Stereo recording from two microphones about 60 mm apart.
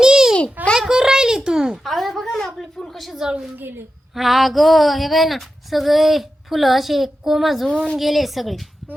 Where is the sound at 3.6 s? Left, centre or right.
Right.